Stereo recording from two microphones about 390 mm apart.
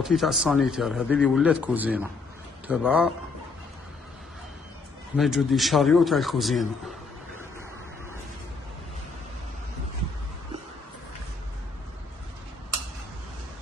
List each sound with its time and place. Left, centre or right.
0.0 s speech: centre
5.1 s speech: centre